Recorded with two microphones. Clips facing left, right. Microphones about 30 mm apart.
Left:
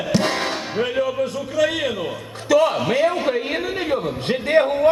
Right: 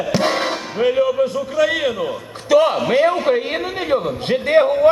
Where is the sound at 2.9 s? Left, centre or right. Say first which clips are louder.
Right 4 dB; right.